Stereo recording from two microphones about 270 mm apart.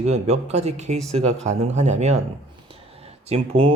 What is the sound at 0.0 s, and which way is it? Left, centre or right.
Speech, right.